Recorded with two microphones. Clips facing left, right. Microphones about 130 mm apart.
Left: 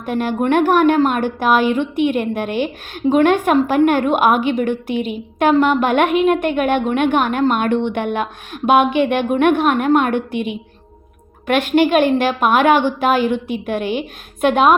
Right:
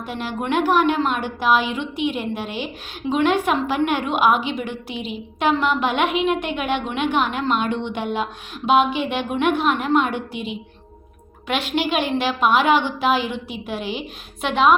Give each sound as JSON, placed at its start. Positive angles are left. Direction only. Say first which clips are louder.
{"t": 0.0, "sound": "a woman's voice", "louder": "left 8 dB", "side_deg": 50}